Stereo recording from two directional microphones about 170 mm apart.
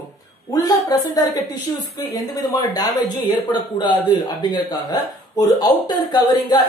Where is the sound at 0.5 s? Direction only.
20° left (ahead or behind).